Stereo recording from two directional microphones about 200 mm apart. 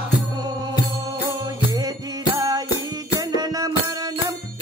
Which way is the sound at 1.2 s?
20° right (ahead or behind).